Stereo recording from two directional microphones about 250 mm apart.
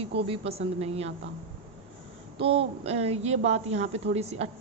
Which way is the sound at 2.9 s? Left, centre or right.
Right.